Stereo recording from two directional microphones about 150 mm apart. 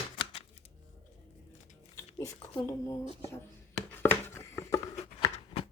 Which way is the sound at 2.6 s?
20° left (ahead or behind).